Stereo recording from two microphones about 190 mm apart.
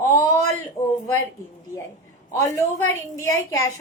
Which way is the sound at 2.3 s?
15° left (ahead or behind).